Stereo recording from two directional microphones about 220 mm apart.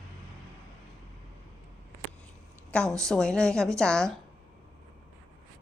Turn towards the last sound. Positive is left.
turn(degrees=5)  # may be behind; listen again after turning